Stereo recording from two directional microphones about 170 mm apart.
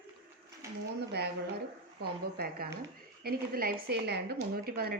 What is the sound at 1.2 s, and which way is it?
A woman's voice, 75° right (ahead or behind).